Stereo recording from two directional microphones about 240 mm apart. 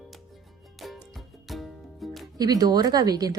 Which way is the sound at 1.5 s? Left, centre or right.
Centre.